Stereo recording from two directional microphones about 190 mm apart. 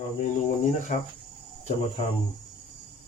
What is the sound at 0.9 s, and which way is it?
Speech, 40° left (ahead or behind).